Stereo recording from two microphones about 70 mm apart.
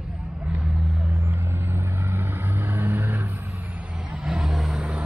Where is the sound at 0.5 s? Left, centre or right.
Centre.